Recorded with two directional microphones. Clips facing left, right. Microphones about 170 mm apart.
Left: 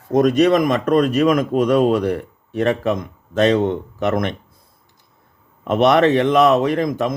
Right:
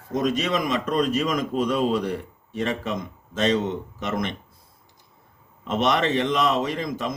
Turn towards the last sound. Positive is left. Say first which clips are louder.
# left 8 dB
turn(degrees=55)  # may be behind; listen again after turning